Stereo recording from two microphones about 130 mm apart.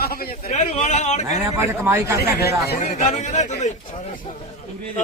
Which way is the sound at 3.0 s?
65° left (ahead or behind).